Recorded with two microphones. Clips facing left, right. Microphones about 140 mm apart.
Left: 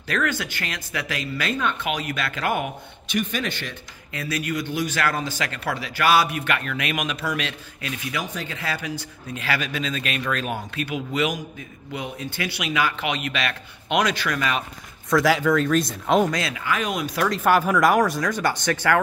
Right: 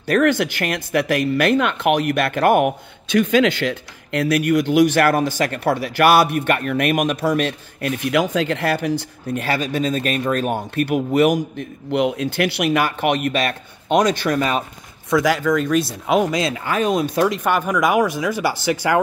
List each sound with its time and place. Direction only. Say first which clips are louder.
0.0 s speech: right 9 dB; 60° right (ahead or behind)
3.2 s speech: right 11 dB; 90° right; by 5.0 s 75° right (ahead or behind)
5.0 s a man's voice: right 8 dB; 55° right (ahead or behind)
8.4 s speech: right 11 dB; 65° right (ahead or behind)
8.8 s speech: right 9 dB; 55° right (ahead or behind)
9.5 s a man's voice: right 5 dB; 40° right (ahead or behind)
10.9 s a man's voice: right 9 dB; 55° right (ahead or behind); by 14.6 s 35° right (ahead or behind)
15.0 s speech: right 2 dB; centre (ahead or behind)
16.5 s speech: right 6 dB; 35° right (ahead or behind)
17.3 s speech: even; 5° left (ahead or behind)